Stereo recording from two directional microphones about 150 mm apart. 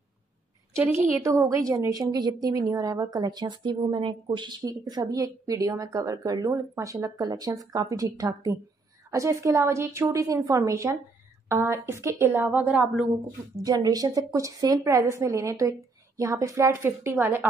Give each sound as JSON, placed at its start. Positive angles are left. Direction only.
{"t": 0.7, "sound": "a woman's voice", "side_deg": -15}
{"t": 13.7, "sound": "a woman's voice", "side_deg": -25}